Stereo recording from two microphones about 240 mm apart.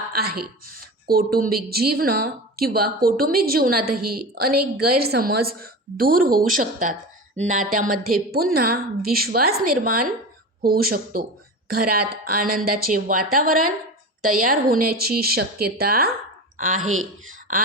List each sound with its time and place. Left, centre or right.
0.1 s speech: right